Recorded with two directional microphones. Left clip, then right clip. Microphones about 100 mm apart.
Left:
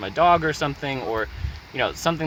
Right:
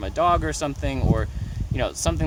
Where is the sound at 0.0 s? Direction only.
55° right (ahead or behind).